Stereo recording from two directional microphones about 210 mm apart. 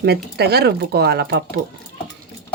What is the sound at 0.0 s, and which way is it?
A woman's voice, 50° right (ahead or behind).